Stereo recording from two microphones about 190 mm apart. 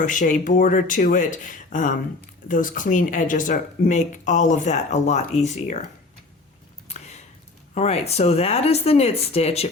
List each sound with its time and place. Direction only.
0.0 s speech: 45° left (ahead or behind)
6.8 s a sound: 35° left (ahead or behind)
7.7 s speech: 35° left (ahead or behind)